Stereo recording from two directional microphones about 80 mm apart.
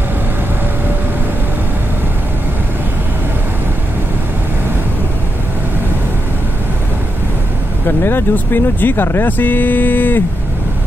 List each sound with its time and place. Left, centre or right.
7.8 s speech: left